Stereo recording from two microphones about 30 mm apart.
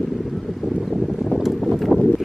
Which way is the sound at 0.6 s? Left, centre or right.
Right.